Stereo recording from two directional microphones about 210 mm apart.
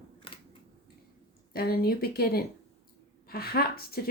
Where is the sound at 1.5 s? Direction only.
45° left (ahead or behind).